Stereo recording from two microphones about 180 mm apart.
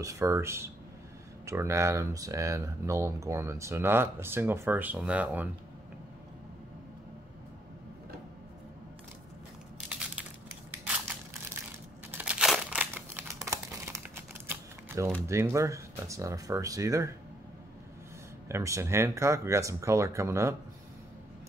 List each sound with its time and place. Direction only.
0.0 s speech: 15° right (ahead or behind)
9.8 s crushing: 5° right (ahead or behind)
12.1 s crumpling: 10° right (ahead or behind)
15.2 s speech: 15° right (ahead or behind)
18.5 s speech: 15° right (ahead or behind)